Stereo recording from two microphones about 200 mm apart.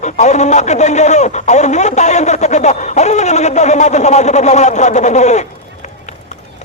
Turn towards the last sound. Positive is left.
turn(degrees=35)  # may be behind; listen again after turning